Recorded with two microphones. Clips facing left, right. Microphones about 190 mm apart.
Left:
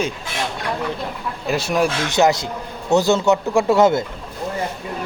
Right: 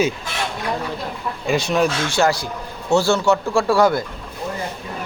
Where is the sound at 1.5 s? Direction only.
5° left (ahead or behind).